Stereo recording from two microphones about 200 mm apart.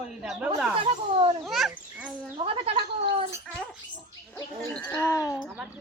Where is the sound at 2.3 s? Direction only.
25° right (ahead or behind).